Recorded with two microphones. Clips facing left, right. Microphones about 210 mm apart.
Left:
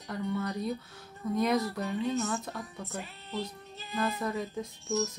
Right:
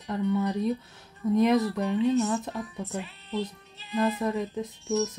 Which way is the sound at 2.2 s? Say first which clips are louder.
Right 5 dB; 20° right (ahead or behind).